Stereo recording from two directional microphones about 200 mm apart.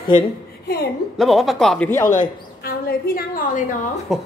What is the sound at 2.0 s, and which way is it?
A woman's voice, 40° left (ahead or behind).